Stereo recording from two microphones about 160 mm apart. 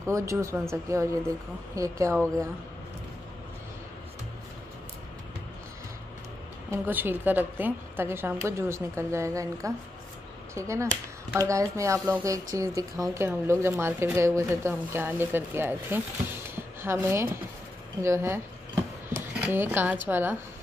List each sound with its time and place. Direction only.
0.0 s speech: 20° right (ahead or behind)
6.7 s speech: 10° right (ahead or behind)
18.0 s a sound: 15° right (ahead or behind)
19.4 s speech: 15° right (ahead or behind)